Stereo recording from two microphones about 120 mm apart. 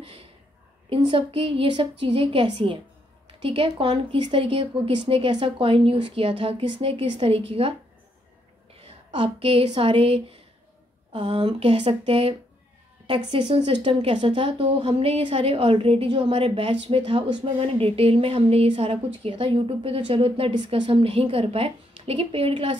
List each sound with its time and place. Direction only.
0.0 s a sound: 55° right (ahead or behind)
0.8 s a woman's voice: 50° right (ahead or behind)
8.7 s a woman's voice: 55° right (ahead or behind)
14.1 s a woman's voice: 45° right (ahead or behind)